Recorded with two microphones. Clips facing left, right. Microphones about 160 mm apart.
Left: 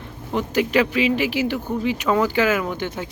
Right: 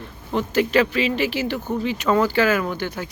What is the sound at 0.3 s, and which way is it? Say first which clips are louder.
Speech: right 1 dB; 15° left (ahead or behind).